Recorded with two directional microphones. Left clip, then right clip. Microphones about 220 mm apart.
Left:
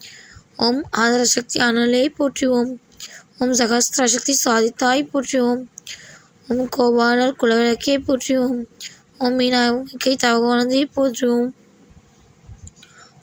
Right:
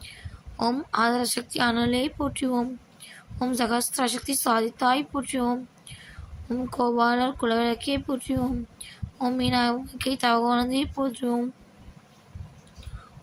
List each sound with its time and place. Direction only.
0.0 s a woman's voice: 20° left (ahead or behind)